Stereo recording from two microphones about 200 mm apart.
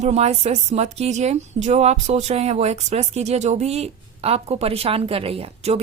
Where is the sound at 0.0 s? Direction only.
35° right (ahead or behind).